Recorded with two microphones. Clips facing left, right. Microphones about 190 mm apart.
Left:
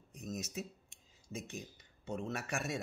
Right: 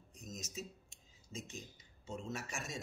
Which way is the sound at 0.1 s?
60° left (ahead or behind).